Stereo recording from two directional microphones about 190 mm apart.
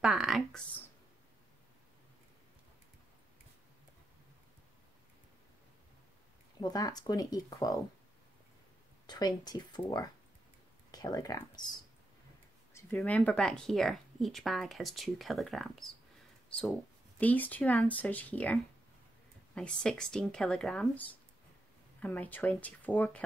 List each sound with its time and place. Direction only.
0.0 s a sound: 5° right (ahead or behind)
6.6 s speech: 20° left (ahead or behind)
9.0 s speech: 20° left (ahead or behind)
12.9 s speech: 5° left (ahead or behind)
22.0 s speech: 10° left (ahead or behind)